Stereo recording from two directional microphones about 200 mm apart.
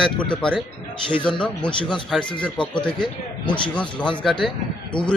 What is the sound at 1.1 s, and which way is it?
Speech, 25° left (ahead or behind).